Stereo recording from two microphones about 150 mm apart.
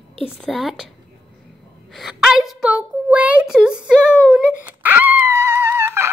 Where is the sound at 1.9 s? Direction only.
Centre (ahead or behind).